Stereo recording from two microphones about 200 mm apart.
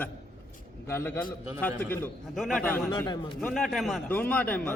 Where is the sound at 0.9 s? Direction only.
10° left (ahead or behind).